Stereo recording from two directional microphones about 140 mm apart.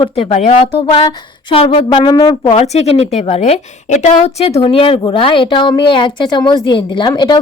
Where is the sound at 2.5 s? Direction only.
45° left (ahead or behind).